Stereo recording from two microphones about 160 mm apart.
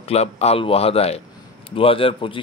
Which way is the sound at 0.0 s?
40° left (ahead or behind).